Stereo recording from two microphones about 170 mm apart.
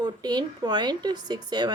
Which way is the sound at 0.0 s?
25° right (ahead or behind).